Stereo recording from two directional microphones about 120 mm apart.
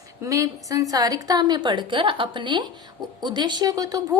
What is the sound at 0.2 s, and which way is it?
A woman's voice, 25° right (ahead or behind).